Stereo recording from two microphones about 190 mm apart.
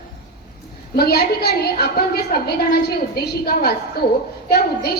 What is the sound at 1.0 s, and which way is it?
A woman's voice, 55° left (ahead or behind).